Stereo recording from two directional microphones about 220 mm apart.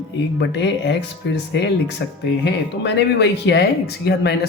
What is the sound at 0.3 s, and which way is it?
Speech, 50° left (ahead or behind).